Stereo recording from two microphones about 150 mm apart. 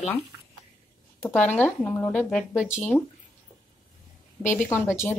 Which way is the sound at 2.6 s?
15° left (ahead or behind).